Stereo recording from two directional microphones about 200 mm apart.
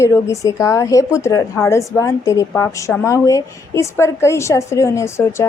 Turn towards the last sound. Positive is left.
turn(degrees=15)  # may be behind; listen again after turning